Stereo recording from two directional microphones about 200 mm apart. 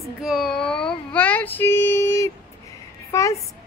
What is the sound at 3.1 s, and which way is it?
Speech, 15° left (ahead or behind).